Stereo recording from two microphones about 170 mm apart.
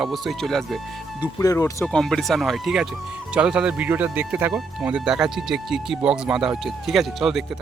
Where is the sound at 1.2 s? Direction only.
20° left (ahead or behind).